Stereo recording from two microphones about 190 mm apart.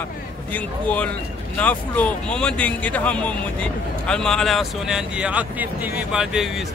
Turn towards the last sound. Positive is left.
turn(degrees=0)  # may be behind; listen again after turning